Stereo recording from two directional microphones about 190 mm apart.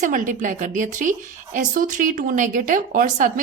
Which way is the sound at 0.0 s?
45° right (ahead or behind).